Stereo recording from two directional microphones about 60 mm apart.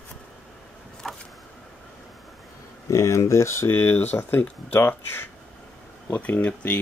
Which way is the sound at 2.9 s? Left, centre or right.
Left.